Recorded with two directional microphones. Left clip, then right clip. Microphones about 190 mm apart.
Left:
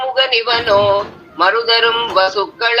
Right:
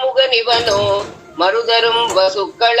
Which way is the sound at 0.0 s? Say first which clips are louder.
Right 1 dB; 35° left (ahead or behind).